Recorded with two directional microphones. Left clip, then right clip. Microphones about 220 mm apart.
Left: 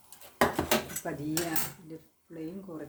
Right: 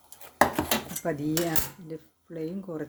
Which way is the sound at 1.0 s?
30° right (ahead or behind).